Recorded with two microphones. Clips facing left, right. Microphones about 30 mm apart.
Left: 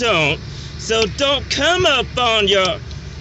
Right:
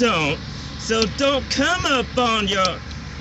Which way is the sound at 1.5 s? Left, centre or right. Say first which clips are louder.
Left 4 dB; left.